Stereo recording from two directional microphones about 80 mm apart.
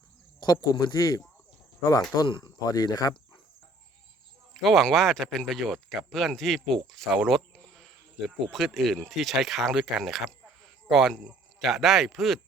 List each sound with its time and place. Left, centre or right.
0.3 s speech: left
2.2 s speech: left
2.6 s speech: left
4.5 s speech: centre
7.5 s a sound: centre
8.4 s speech: centre
10.6 s a sound: centre
11.6 s speech: centre